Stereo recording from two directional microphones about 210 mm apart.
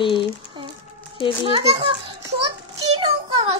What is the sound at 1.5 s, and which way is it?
Speech, 25° right (ahead or behind).